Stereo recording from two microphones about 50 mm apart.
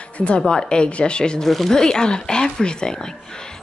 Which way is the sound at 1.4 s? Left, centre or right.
Centre.